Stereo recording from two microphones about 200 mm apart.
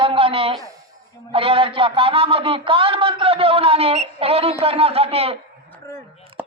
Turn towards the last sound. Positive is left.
turn(degrees=-30)  # may be behind; listen again after turning